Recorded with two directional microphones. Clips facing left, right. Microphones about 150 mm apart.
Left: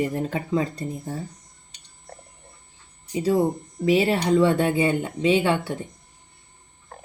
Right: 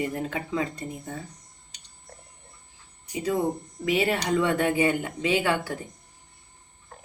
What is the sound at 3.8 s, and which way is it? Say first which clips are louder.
Speech: left 5 dB; 30° left (ahead or behind).